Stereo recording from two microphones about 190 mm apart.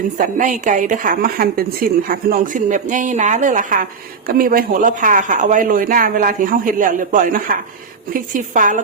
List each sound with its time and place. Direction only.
0.2 s speech: 45° right (ahead or behind)